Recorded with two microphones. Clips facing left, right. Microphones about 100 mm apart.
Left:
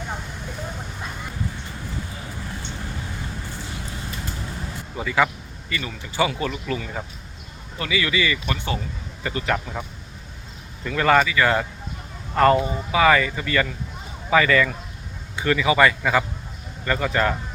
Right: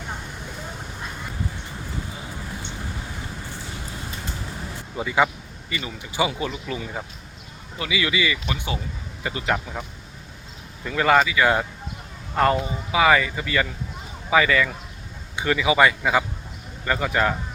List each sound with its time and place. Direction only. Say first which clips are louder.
4.9 s speech: even; 20° right (ahead or behind)
10.8 s speech: even; 10° right (ahead or behind)